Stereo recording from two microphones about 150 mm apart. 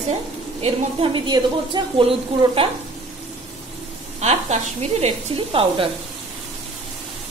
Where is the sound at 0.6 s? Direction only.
35° right (ahead or behind).